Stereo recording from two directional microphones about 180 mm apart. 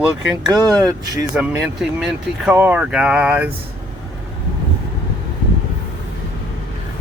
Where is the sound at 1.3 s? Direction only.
5° right (ahead or behind).